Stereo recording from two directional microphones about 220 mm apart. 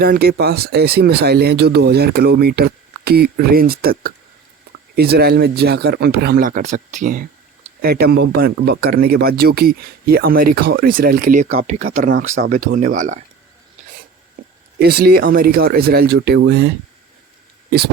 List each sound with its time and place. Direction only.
0.0 s speech: 45° right (ahead or behind)
14.8 s speech: 45° right (ahead or behind)